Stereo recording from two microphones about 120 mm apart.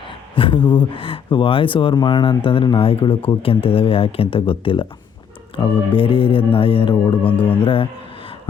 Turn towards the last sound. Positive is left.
turn(degrees=50)  # may be behind; listen again after turning